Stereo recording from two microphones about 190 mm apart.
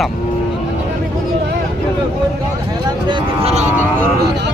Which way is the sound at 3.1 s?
30° right (ahead or behind).